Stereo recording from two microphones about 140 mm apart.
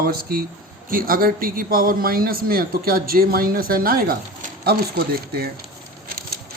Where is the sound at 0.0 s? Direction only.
90° right.